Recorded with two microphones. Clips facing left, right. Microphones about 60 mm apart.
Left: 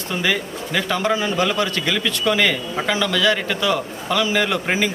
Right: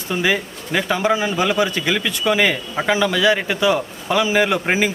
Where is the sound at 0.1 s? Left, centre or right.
Centre.